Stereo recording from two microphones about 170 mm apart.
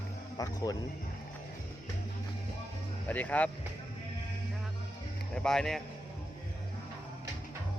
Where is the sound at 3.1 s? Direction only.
10° left (ahead or behind).